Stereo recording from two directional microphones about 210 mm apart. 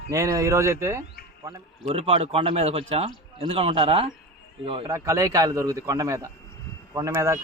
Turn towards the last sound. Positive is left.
turn(degrees=-15)  # may be behind; listen again after turning